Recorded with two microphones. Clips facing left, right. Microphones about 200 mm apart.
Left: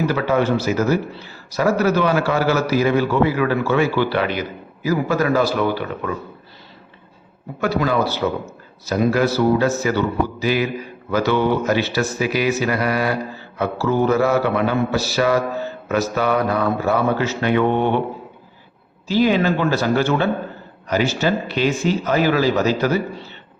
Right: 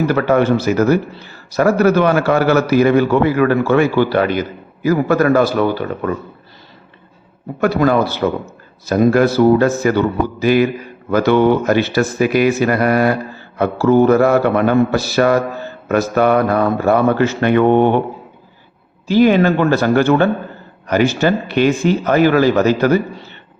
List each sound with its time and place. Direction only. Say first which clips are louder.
0.1 s a man's voice: right 5 dB; 55° right (ahead or behind)
7.6 s a man's voice: right 5 dB; 55° right (ahead or behind)
19.0 s a man's voice: right 5 dB; 55° right (ahead or behind)